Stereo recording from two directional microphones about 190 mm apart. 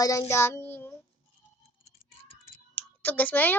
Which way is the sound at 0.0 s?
15° left (ahead or behind).